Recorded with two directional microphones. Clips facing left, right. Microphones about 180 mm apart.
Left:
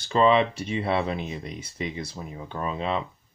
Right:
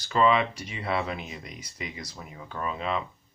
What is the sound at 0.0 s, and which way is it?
Speech, 25° left (ahead or behind).